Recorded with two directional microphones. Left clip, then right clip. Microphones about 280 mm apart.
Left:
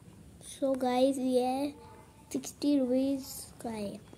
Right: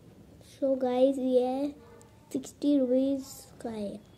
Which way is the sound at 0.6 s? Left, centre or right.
Left.